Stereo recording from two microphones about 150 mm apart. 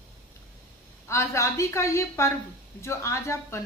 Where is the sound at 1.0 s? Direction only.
20° left (ahead or behind).